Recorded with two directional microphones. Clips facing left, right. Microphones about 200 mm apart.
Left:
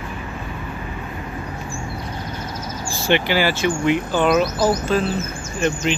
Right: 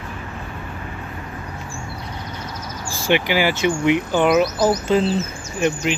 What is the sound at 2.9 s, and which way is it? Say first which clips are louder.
Speech: even; 10° right (ahead or behind).